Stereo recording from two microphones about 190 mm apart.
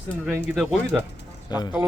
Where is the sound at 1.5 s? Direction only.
20° left (ahead or behind).